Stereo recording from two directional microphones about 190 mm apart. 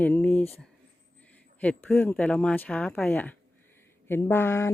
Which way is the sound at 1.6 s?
5° left (ahead or behind).